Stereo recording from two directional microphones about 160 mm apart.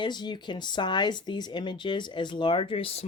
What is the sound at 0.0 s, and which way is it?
Speech, 25° left (ahead or behind).